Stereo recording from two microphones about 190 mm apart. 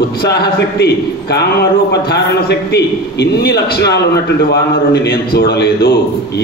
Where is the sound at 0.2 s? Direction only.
55° left (ahead or behind).